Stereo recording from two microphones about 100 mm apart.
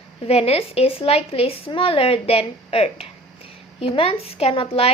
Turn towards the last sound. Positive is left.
turn(degrees=70)  # may be behind; listen again after turning